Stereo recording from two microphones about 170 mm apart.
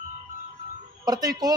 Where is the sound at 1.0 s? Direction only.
20° right (ahead or behind).